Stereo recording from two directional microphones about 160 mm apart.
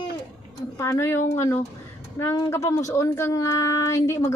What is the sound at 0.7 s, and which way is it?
Speech, 20° left (ahead or behind).